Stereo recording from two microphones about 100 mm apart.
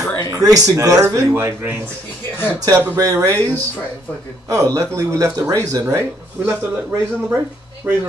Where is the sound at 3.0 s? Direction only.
35° right (ahead or behind).